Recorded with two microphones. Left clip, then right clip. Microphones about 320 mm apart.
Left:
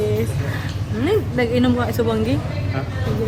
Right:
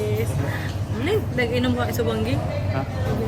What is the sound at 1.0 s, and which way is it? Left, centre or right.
A woman's voice, centre.